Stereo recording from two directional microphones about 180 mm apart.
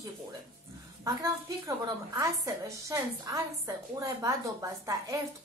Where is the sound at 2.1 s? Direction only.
20° right (ahead or behind).